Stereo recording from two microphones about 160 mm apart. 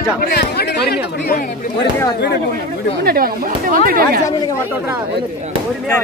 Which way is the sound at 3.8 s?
65° right (ahead or behind).